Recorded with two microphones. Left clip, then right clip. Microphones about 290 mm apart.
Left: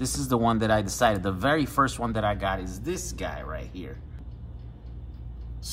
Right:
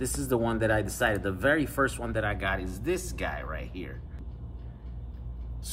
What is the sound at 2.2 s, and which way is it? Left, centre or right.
Speech, centre.